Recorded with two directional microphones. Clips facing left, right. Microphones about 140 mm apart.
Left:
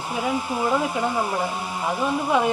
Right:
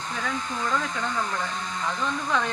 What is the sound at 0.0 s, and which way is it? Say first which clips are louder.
Speech: left 6 dB; 10° left (ahead or behind).